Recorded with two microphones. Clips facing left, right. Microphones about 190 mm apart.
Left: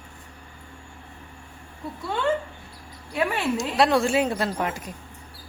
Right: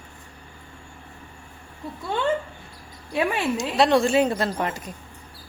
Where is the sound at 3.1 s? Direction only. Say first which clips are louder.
Right 2 dB; 20° right (ahead or behind).